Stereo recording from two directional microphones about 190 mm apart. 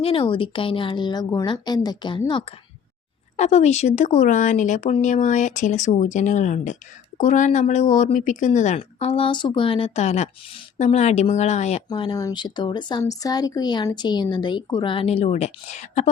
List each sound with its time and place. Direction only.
0.0 s speech: 30° left (ahead or behind)
3.3 s speech: 35° left (ahead or behind)
11.9 s speech: 25° left (ahead or behind)